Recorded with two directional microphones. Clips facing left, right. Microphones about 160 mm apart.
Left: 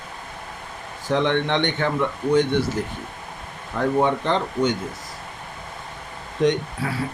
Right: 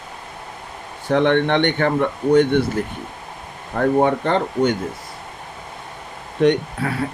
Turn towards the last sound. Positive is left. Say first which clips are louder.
# right 4 dB
turn(degrees=-65)  # may be behind; listen again after turning